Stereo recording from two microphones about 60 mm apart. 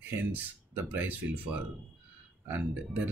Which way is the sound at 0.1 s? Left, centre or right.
Right.